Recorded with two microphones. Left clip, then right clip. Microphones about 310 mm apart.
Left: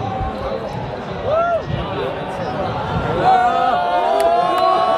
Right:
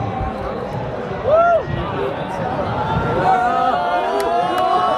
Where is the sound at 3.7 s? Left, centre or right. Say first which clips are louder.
Left 2 dB; left.